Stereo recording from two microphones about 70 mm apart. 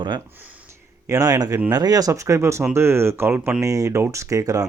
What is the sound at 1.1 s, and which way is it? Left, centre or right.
Speech, right.